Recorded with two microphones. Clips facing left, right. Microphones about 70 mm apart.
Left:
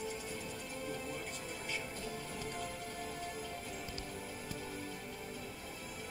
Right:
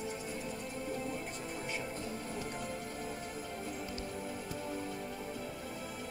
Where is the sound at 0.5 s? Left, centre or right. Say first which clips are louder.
Right 3 dB; right.